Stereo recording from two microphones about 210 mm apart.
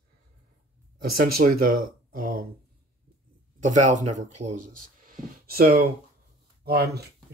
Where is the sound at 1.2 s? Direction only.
40° right (ahead or behind).